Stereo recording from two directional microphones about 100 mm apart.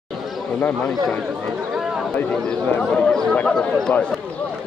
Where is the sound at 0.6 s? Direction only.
15° left (ahead or behind).